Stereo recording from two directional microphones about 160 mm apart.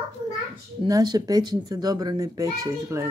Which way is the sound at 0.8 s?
25° right (ahead or behind).